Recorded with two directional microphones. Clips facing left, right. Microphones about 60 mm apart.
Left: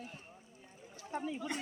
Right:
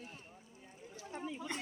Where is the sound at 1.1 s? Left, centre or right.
Centre.